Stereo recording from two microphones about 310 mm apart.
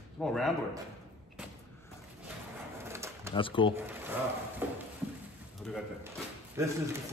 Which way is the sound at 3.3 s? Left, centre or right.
Centre.